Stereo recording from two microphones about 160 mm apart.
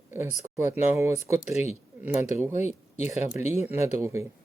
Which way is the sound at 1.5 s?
45° left (ahead or behind).